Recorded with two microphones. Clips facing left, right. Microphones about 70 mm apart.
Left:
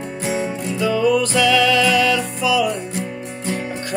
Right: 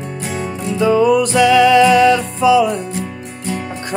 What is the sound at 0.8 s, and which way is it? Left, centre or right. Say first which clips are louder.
Music: right 5 dB; right.